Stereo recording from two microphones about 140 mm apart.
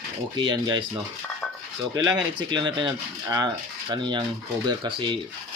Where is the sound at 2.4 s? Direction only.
35° right (ahead or behind).